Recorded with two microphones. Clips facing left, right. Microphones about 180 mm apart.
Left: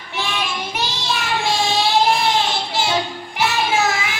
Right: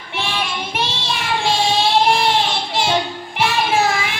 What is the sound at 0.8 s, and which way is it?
Child singing, 25° right (ahead or behind).